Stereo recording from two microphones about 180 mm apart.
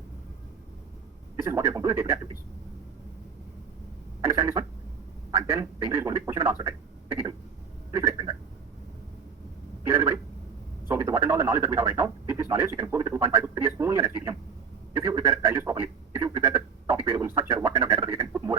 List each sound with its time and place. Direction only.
1.5 s a man's voice: 15° right (ahead or behind)
4.2 s a man's voice: 15° right (ahead or behind)
7.9 s a sound: 15° right (ahead or behind)
9.8 s a man's voice: 15° right (ahead or behind)